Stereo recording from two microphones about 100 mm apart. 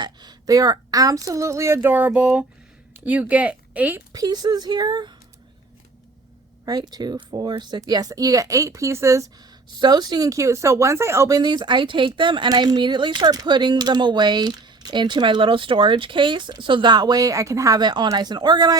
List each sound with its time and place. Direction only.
0.0 s speech: 45° right (ahead or behind); by 4.0 s 15° right (ahead or behind)
4.1 s speech: 40° right (ahead or behind)
6.7 s speech: 40° right (ahead or behind)
9.8 s speech: 45° right (ahead or behind); by 11.3 s 25° right (ahead or behind)
11.3 s speech: 45° right (ahead or behind)